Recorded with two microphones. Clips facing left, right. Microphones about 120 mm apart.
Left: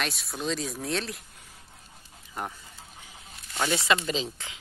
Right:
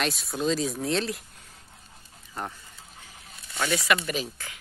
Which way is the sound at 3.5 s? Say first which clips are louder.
Even; 25° left (ahead or behind).